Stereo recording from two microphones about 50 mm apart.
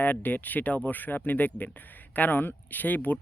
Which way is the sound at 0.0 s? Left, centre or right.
Left.